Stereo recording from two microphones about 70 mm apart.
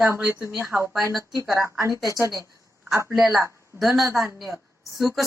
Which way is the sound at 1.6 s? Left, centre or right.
Right.